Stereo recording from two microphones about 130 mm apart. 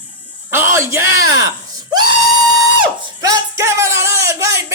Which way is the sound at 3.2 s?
25° right (ahead or behind).